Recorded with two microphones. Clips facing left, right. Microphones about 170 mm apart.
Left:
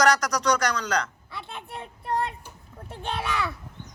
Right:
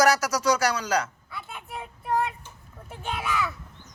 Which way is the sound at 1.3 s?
25° left (ahead or behind).